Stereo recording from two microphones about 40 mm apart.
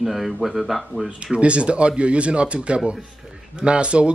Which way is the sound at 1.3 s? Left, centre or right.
Right.